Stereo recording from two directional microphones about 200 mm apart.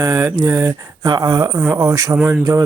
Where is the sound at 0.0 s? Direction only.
20° right (ahead or behind).